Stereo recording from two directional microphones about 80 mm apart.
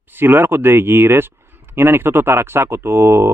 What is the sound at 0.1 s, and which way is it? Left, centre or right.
Speech, right.